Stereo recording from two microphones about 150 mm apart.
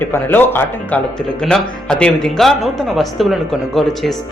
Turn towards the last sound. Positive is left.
turn(degrees=0)  # may be behind; listen again after turning